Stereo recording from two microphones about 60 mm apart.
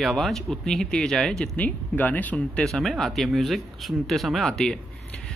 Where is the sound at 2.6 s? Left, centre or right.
Centre.